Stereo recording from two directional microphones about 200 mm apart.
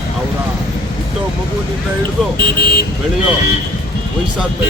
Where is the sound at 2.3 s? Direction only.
50° left (ahead or behind).